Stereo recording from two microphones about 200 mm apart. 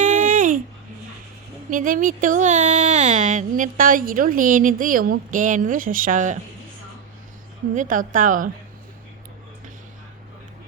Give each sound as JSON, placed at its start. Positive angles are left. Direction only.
{"t": 0.0, "sound": "babbling", "side_deg": -40}
{"t": 1.7, "sound": "speech", "side_deg": -40}
{"t": 7.8, "sound": "speech", "side_deg": -40}